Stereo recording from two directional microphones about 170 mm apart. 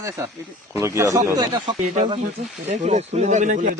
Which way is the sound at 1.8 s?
50° right (ahead or behind).